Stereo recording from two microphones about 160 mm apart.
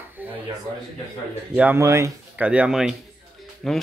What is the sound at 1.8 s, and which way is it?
Speech, 20° right (ahead or behind).